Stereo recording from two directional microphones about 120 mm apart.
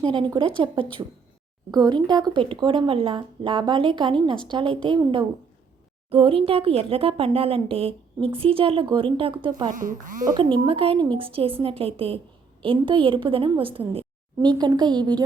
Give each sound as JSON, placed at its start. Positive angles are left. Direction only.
{"t": 0.0, "sound": "speech", "side_deg": -45}
{"t": 9.6, "sound": "speech", "side_deg": -90}
{"t": 10.3, "sound": "speech", "side_deg": -45}
{"t": 14.4, "sound": "speech", "side_deg": -35}